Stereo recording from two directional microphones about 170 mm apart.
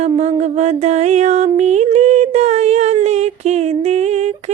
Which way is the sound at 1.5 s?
40° right (ahead or behind).